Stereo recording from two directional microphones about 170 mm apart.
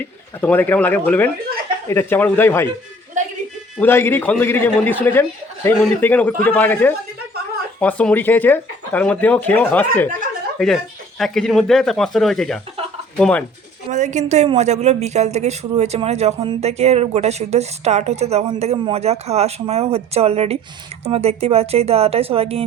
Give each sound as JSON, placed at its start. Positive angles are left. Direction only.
{"t": 0.0, "sound": "speech", "side_deg": 10}
{"t": 3.8, "sound": "speech", "side_deg": 15}
{"t": 13.9, "sound": "a woman's voice", "side_deg": -45}